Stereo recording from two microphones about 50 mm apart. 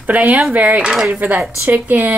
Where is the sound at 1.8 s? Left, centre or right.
Right.